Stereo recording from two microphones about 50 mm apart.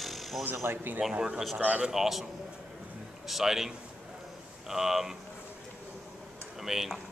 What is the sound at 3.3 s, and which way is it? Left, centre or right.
A man's voice, centre.